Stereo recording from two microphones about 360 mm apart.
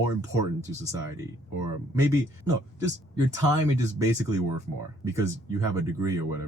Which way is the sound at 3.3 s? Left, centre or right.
Centre.